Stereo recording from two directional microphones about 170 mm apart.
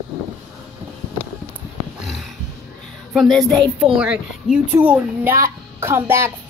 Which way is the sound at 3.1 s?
Centre (ahead or behind).